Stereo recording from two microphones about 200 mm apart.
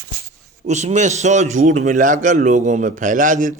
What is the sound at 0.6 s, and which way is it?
A man's voice, 35° right (ahead or behind).